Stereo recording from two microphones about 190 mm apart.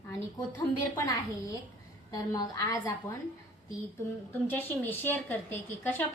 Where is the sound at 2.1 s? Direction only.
20° left (ahead or behind).